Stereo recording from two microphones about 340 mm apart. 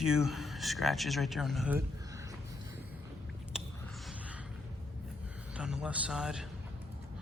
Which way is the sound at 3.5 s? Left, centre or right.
Centre.